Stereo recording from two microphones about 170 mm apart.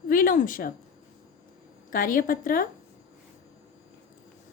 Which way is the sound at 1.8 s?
55° left (ahead or behind).